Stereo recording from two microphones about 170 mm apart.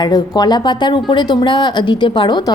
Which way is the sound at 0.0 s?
25° left (ahead or behind).